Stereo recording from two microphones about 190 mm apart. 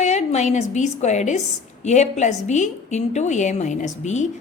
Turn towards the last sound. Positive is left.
turn(degrees=40)  # may be behind; listen again after turning